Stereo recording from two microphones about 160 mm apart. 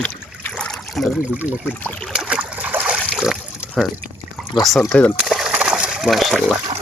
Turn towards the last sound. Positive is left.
turn(degrees=0)  # may be behind; listen again after turning